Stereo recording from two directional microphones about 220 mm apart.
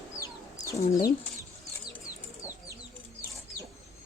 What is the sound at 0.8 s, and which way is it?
Speech, 30° left (ahead or behind).